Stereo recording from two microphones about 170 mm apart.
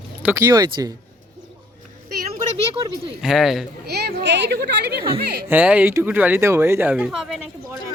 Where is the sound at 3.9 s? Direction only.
75° right (ahead or behind).